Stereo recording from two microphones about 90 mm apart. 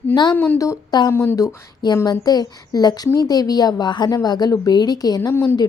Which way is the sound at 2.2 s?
50° left (ahead or behind).